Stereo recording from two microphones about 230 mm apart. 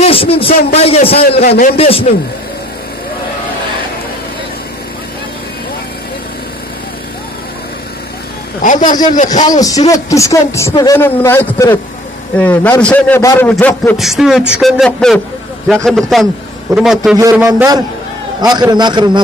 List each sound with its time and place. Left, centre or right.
0.0 s a man's voice: left
1.5 s a man's voice: left
1.8 s a man's voice: left
8.6 s a man's voice: left
9.5 s a man's voice: centre
17.2 s a man's voice: centre